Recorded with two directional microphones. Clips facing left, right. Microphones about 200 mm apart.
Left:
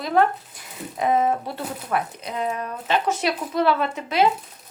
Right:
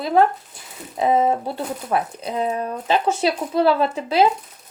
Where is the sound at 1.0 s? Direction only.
30° right (ahead or behind).